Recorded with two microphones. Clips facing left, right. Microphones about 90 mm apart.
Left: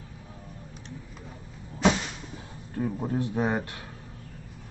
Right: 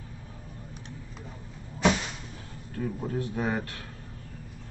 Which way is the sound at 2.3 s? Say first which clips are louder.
Left 3 dB; 20° left (ahead or behind).